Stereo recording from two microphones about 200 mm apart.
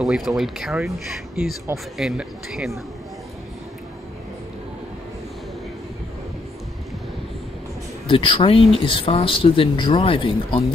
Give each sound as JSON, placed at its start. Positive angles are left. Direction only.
{"t": 0.0, "sound": "speech", "side_deg": 0}
{"t": 8.1, "sound": "speech", "side_deg": 25}